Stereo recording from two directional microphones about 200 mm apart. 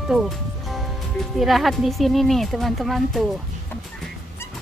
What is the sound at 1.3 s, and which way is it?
Speech, centre (ahead or behind).